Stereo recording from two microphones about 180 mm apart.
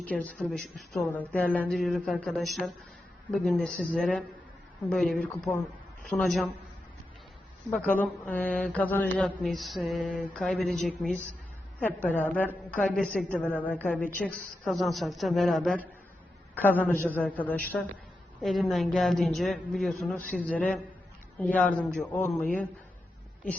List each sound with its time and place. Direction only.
0.0 s a man's voice: 10° left (ahead or behind)
7.7 s a man's voice: 10° left (ahead or behind)